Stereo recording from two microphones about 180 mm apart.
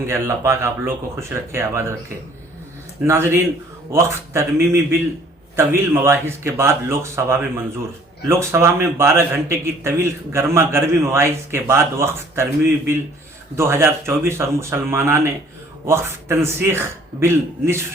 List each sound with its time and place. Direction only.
0.0 s a man's voice: 15° right (ahead or behind)
3.0 s a man's voice: 15° right (ahead or behind)
13.6 s a man's voice: 15° right (ahead or behind)